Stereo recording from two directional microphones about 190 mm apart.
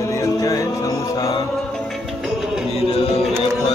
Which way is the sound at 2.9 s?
30° left (ahead or behind).